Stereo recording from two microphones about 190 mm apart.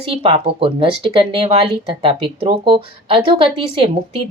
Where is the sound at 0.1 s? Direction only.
30° right (ahead or behind).